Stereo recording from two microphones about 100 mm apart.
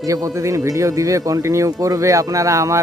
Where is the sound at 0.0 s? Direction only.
35° right (ahead or behind).